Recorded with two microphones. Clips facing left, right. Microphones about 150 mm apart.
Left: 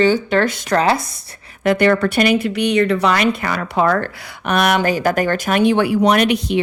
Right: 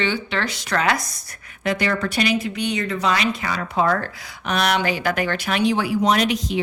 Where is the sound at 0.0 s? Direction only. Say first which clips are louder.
Left 9 dB; 45° left (ahead or behind).